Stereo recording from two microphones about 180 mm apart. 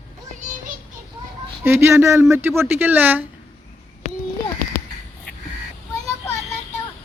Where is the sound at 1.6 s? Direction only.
15° right (ahead or behind).